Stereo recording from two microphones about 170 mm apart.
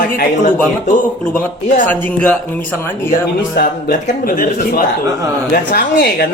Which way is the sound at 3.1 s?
55° left (ahead or behind).